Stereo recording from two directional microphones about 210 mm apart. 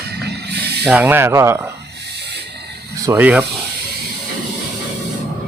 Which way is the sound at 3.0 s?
10° right (ahead or behind).